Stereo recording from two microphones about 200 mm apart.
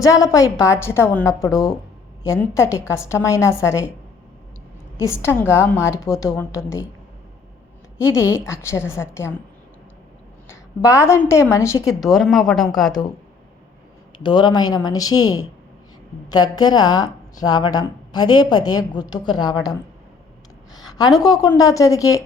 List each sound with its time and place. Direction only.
0.0 s a woman's voice: 15° left (ahead or behind)
4.9 s a woman's voice: 15° left (ahead or behind)
7.9 s a woman's voice: 15° left (ahead or behind)
10.5 s a woman's voice: 15° left (ahead or behind)
11.9 s speech: centre (ahead or behind)
14.2 s a woman's voice: 20° left (ahead or behind)
20.7 s a woman's voice: 20° left (ahead or behind)